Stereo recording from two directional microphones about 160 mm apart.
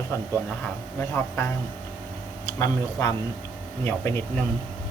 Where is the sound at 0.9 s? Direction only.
15° left (ahead or behind).